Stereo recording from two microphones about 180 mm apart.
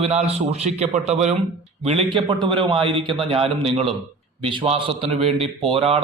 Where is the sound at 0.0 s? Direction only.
35° right (ahead or behind).